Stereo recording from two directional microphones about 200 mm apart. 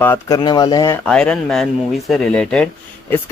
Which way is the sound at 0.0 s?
15° left (ahead or behind).